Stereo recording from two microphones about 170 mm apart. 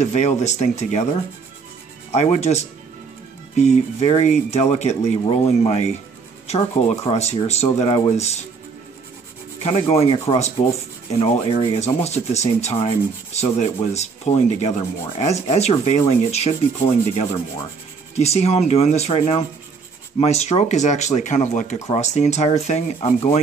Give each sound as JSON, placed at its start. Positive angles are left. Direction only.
{"t": 0.0, "sound": "rub", "side_deg": 40}
{"t": 2.1, "sound": "rub", "side_deg": 40}
{"t": 9.6, "sound": "rub", "side_deg": 40}